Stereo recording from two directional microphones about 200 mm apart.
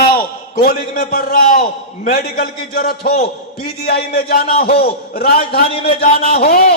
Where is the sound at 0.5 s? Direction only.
45° left (ahead or behind).